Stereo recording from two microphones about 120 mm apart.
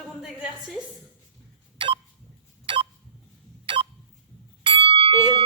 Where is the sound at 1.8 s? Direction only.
40° right (ahead or behind).